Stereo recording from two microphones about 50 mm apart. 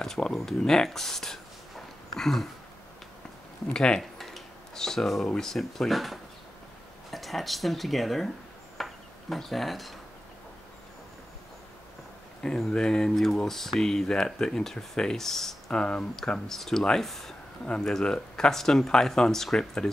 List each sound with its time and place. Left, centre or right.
0.0 s speech: centre
3.7 s speech: centre
4.0 s a sound: centre
5.3 s speech: centre
8.7 s a sound: centre
12.5 s speech: centre
13.1 s speech: centre